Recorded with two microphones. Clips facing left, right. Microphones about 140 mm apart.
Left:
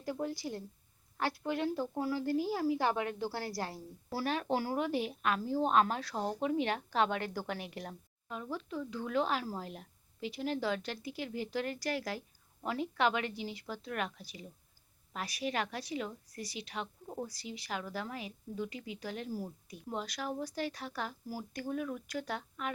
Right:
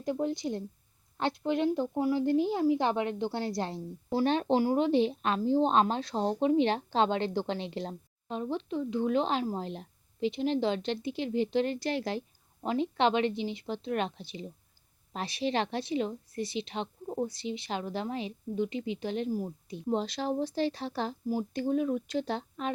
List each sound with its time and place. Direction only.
0.0 s a woman's voice: 20° right (ahead or behind)